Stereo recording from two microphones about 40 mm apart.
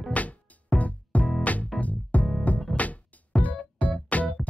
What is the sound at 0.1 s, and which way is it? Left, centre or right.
Music, left.